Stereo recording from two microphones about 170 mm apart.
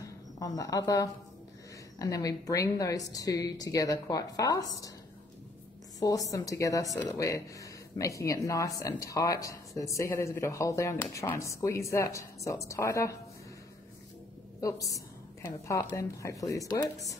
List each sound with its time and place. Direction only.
0.0 s a sound: 20° left (ahead or behind)
2.0 s a woman's voice: 20° left (ahead or behind)
5.9 s speech: 20° left (ahead or behind)
14.6 s a woman's voice: 20° left (ahead or behind)